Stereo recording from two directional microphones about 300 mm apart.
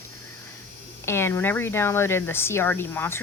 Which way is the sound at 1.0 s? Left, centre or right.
Centre.